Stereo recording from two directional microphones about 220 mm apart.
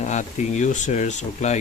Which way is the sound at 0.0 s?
35° left (ahead or behind).